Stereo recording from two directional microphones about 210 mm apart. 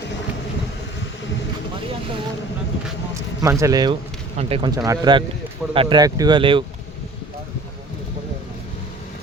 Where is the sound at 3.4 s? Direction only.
15° right (ahead or behind).